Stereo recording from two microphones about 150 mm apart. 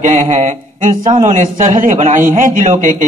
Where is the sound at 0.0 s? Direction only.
50° right (ahead or behind).